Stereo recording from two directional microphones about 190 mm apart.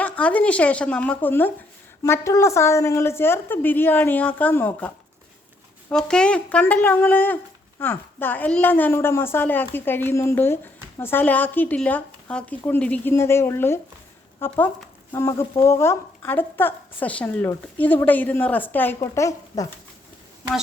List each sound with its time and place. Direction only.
0.0 s a woman's voice: 5° left (ahead or behind)
5.9 s a woman's voice: 5° left (ahead or behind)